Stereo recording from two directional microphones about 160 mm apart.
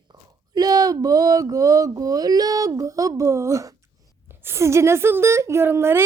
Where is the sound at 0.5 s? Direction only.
25° right (ahead or behind).